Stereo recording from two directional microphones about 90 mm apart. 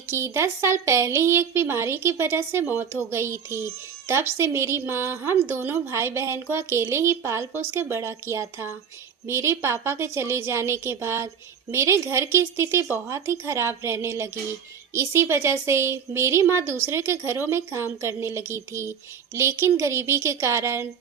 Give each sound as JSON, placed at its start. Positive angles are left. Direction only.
{"t": 0.1, "sound": "speech", "side_deg": -30}